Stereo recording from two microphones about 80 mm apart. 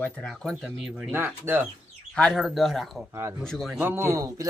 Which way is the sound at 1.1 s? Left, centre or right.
Right.